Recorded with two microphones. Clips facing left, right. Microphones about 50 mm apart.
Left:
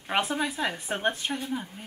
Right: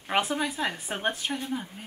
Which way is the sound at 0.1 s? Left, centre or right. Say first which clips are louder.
Even; centre.